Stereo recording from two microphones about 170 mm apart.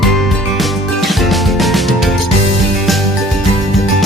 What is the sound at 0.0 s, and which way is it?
Music, centre (ahead or behind).